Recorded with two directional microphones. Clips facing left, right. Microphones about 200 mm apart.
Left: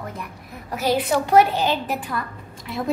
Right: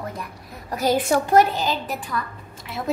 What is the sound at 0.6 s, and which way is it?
A woman's voice, 45° right (ahead or behind).